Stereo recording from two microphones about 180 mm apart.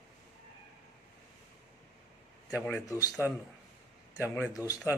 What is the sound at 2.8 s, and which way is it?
Speech, 20° left (ahead or behind).